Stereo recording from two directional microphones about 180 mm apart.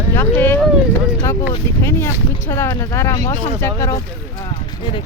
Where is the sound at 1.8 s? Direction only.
15° left (ahead or behind).